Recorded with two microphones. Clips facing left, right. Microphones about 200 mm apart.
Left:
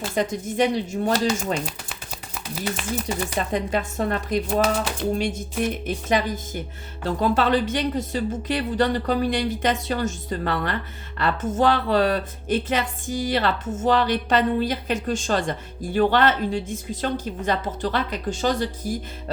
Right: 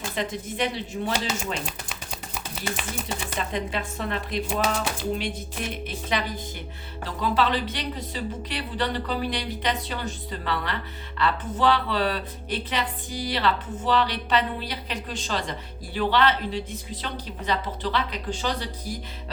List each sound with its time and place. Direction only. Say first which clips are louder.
0.1 s speech: left 5 dB; 45° left (ahead or behind)
1.6 s a sound: left 1 dB; centre (ahead or behind)
3.3 s speech: left 4 dB; 45° left (ahead or behind)